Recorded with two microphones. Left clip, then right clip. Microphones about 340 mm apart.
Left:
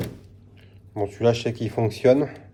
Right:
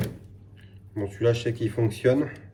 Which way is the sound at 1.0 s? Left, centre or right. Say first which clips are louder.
Left 3 dB; centre.